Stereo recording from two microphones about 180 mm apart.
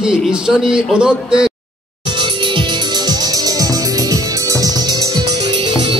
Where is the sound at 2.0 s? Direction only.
25° right (ahead or behind).